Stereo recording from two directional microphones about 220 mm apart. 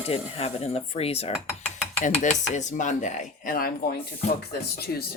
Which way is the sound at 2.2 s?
35° left (ahead or behind).